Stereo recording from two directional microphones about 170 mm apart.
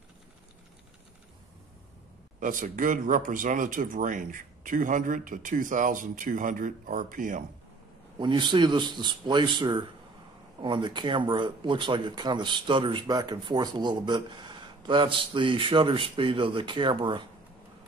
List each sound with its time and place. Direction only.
2.4 s speech: 50° right (ahead or behind)
8.2 s speech: 25° right (ahead or behind)